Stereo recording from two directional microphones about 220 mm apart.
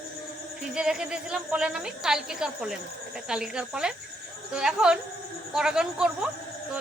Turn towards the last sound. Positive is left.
turn(degrees=-5)  # may be behind; listen again after turning